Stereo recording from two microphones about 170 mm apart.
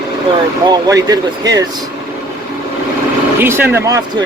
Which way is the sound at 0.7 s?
20° right (ahead or behind).